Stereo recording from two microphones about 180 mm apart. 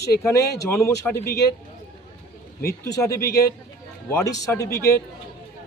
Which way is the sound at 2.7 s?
15° left (ahead or behind).